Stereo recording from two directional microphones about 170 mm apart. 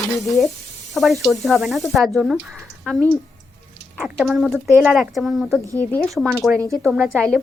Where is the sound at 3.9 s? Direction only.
Centre (ahead or behind).